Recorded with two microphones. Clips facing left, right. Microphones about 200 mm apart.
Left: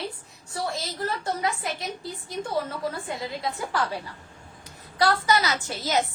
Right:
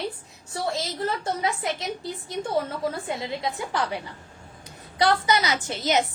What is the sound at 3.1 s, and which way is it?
A woman's voice, 25° right (ahead or behind).